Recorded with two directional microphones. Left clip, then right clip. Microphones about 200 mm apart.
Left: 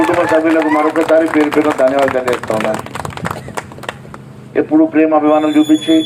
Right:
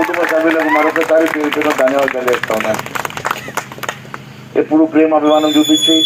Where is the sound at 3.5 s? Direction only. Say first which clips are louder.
Right 3 dB; 25° right (ahead or behind).